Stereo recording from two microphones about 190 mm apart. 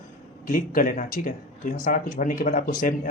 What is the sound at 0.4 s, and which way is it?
Speech, 45° left (ahead or behind).